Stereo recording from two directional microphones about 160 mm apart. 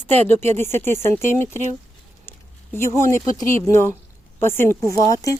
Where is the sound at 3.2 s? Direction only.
35° right (ahead or behind).